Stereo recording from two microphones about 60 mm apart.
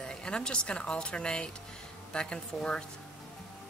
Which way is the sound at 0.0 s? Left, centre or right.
Centre.